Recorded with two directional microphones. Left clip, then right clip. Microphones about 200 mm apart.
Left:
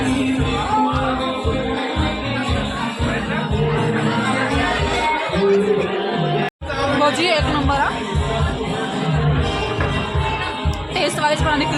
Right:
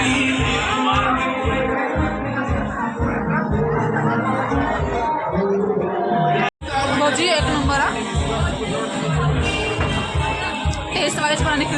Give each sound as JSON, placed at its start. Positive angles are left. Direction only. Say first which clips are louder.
{"t": 7.0, "sound": "music", "louder": "left 2 dB", "side_deg": 5}
{"t": 11.0, "sound": "music", "louder": "left 2 dB", "side_deg": 0}